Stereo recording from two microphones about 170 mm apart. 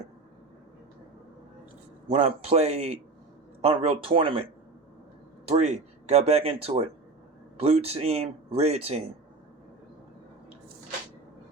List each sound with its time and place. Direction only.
2.0 s speech: 35° right (ahead or behind)
5.5 s speech: 40° right (ahead or behind)